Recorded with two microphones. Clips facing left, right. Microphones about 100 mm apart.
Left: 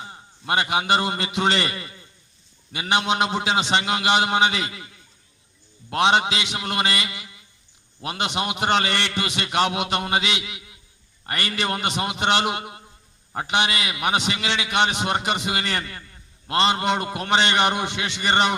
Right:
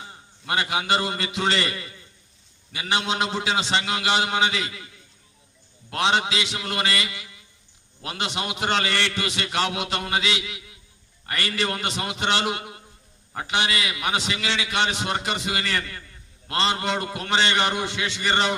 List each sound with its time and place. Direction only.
0.0 s a man's voice: 25° left (ahead or behind)
5.9 s a man's voice: 30° left (ahead or behind)